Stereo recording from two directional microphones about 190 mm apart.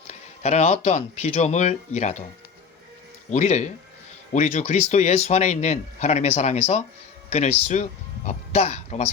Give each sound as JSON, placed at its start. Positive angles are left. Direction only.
{"t": 0.1, "sound": "speech", "side_deg": 35}
{"t": 3.2, "sound": "speech", "side_deg": 35}